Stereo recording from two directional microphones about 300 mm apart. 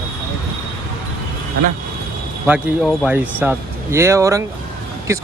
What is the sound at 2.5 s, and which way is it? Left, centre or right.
Speech, centre.